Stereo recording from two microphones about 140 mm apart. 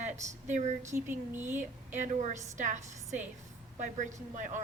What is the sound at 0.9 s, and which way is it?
Speech, 15° right (ahead or behind).